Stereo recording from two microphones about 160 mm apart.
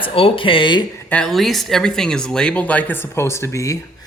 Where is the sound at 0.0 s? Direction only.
35° left (ahead or behind).